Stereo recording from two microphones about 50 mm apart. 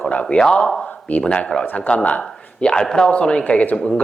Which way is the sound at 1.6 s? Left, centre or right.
Left.